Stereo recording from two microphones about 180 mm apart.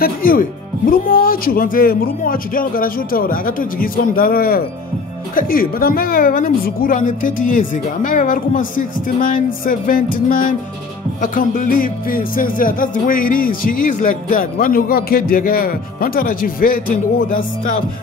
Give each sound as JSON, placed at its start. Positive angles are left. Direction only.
{"t": 0.0, "sound": "speech", "side_deg": 55}